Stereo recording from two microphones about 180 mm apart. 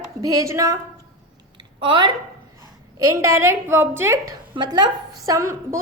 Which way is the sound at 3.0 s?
15° right (ahead or behind).